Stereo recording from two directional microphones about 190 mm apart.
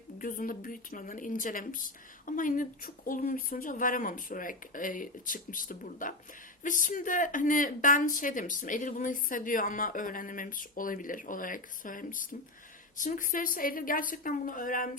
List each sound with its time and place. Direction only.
0.2 s speech: 45° left (ahead or behind)